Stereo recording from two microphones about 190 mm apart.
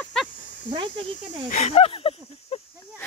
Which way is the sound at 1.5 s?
35° left (ahead or behind).